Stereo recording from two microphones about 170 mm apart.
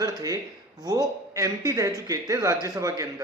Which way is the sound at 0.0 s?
20° right (ahead or behind).